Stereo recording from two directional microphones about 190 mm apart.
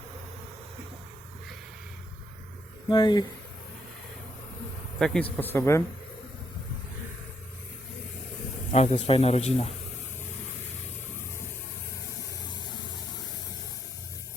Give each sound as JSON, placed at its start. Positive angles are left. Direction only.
{"t": 2.9, "sound": "speech", "side_deg": 25}
{"t": 4.9, "sound": "speech", "side_deg": 5}
{"t": 8.7, "sound": "a man's voice", "side_deg": 35}